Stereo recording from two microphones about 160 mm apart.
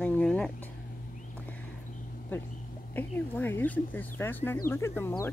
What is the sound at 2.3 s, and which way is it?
Speech, 10° left (ahead or behind).